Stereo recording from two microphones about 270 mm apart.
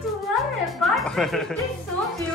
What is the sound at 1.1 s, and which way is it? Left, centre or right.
Speech, centre.